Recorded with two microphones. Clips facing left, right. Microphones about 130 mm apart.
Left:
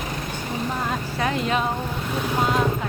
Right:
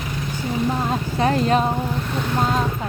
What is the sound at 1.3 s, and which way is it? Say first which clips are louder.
Speech: right 5 dB; 40° right (ahead or behind).